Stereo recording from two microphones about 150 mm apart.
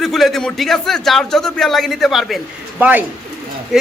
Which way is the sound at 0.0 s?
Centre (ahead or behind).